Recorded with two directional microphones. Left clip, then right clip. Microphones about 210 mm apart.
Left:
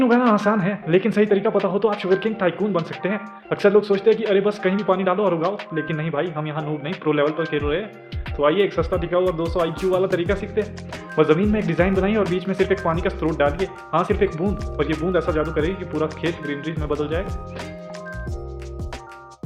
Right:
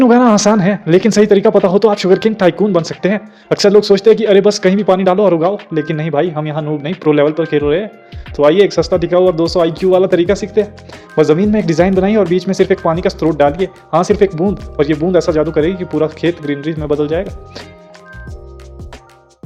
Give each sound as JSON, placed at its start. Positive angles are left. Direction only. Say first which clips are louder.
{"t": 0.0, "sound": "speech", "louder": "right 8 dB", "side_deg": -40}